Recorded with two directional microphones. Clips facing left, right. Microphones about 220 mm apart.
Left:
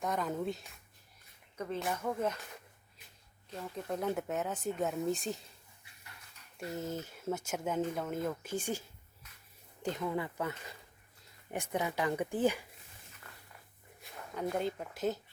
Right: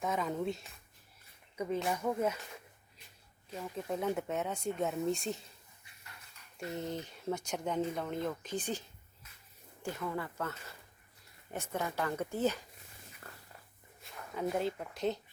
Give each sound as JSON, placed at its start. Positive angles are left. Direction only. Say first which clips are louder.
{"t": 0.0, "sound": "speech", "louder": "even", "side_deg": 0}
{"t": 1.9, "sound": "speech", "louder": "even", "side_deg": -10}
{"t": 3.8, "sound": "speech", "louder": "even", "side_deg": 0}
{"t": 6.6, "sound": "speech", "louder": "even", "side_deg": 0}
{"t": 14.0, "sound": "speech", "louder": "right 1 dB", "side_deg": 0}